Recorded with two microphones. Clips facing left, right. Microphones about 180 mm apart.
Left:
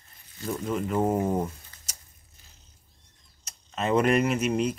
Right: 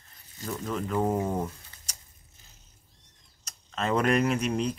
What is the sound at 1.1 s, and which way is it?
Speech, 15° left (ahead or behind).